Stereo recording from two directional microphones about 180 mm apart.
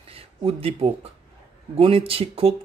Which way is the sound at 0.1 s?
30° right (ahead or behind).